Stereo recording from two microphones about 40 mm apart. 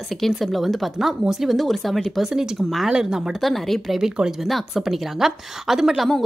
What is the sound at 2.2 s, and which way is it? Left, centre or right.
A woman's voice, centre.